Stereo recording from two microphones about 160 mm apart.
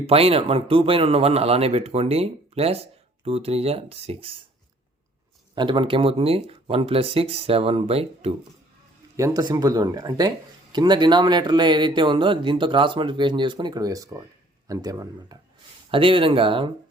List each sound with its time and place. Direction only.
0.0 s speech: 40° right (ahead or behind)
5.5 s speech: 30° right (ahead or behind)
9.1 s speech: 20° right (ahead or behind)
15.9 s speech: 35° right (ahead or behind)